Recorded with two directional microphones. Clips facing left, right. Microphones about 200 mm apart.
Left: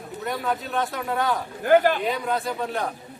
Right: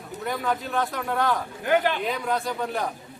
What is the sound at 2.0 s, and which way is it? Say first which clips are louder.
Speech: left 1 dB; centre (ahead or behind).